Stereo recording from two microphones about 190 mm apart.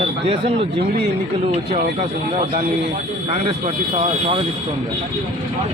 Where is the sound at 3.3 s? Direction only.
35° right (ahead or behind).